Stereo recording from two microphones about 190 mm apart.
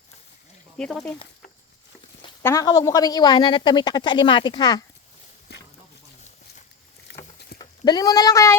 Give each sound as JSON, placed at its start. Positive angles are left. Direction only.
{"t": 0.8, "sound": "speech", "side_deg": 5}
{"t": 2.4, "sound": "a woman's voice", "side_deg": 15}
{"t": 5.5, "sound": "a sound", "side_deg": 60}
{"t": 7.1, "sound": "rowboat", "side_deg": 70}
{"t": 7.6, "sound": "speech", "side_deg": 20}